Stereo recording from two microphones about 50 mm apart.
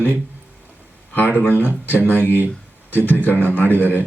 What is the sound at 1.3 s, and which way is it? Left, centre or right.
Speech, left.